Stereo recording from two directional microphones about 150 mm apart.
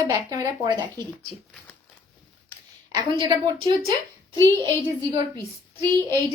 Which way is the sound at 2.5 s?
20° left (ahead or behind).